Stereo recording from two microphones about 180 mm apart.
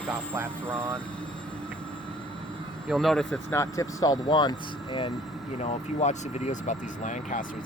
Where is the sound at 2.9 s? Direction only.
Centre (ahead or behind).